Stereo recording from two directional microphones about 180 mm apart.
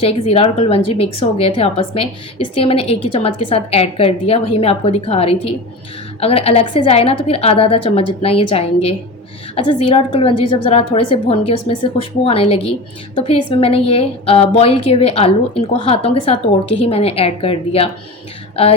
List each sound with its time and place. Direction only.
0.0 s a woman's voice: 35° left (ahead or behind)